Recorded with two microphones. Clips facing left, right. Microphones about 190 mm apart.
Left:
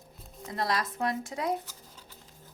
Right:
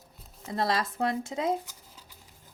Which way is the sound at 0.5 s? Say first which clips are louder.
Right 2 dB; 30° right (ahead or behind).